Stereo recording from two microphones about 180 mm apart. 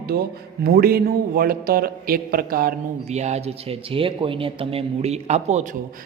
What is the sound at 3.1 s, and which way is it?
A man's voice, 40° right (ahead or behind).